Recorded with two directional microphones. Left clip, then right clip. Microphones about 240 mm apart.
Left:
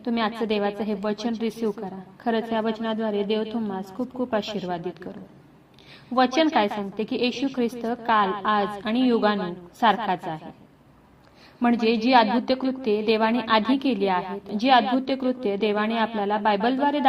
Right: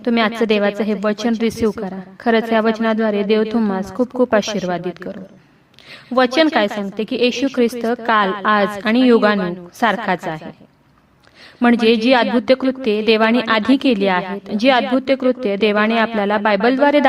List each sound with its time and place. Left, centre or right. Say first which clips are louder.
0.0 s a woman's voice: right 9 dB; right
6.1 s a woman's voice: right 6 dB; right
7.0 s a woman's voice: right 9 dB; right
7.5 s a woman's voice: right 9 dB; right
11.6 s a woman's voice: right 8 dB; right
12.9 s a woman's voice: right 7 dB; right
13.4 s a woman's voice: right 4 dB; right
13.7 s a woman's voice: right 9 dB; right
14.0 s a woman's voice: right 6 dB; right